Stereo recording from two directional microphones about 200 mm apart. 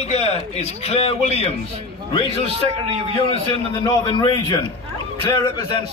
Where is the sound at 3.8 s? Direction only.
25° left (ahead or behind).